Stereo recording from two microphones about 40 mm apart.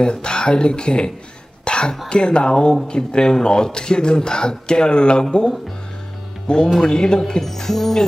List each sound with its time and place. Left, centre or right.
0.0 s speech: left
1.6 s throat clearing: left
2.0 s a woman's voice: left; by 8.0 s centre